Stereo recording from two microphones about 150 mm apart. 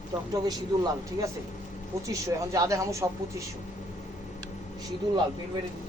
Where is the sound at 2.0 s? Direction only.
20° right (ahead or behind).